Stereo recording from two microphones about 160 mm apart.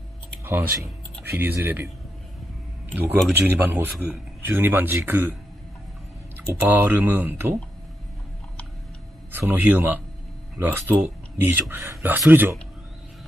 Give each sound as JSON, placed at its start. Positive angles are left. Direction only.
{"t": 0.5, "sound": "speech", "side_deg": -15}
{"t": 2.9, "sound": "speech", "side_deg": -10}
{"t": 6.3, "sound": "speech", "side_deg": -10}
{"t": 9.3, "sound": "speech", "side_deg": -15}